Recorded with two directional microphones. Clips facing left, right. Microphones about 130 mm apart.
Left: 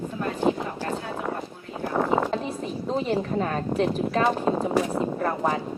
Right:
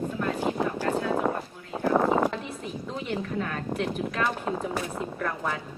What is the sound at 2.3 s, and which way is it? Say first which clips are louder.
A woman's voice: left 6 dB; 35° left (ahead or behind).